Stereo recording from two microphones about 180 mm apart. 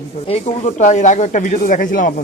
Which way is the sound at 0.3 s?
40° left (ahead or behind).